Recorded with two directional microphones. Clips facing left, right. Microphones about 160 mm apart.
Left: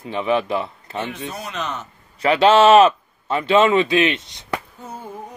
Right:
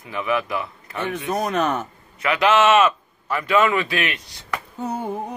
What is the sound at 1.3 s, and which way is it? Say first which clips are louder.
Speech: right 7 dB; 50° right (ahead or behind).